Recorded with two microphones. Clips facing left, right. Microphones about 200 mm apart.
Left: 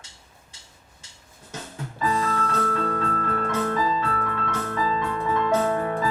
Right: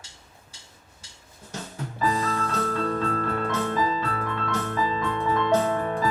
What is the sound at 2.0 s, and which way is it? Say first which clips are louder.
Music: left 1 dB; 30° right (ahead or behind).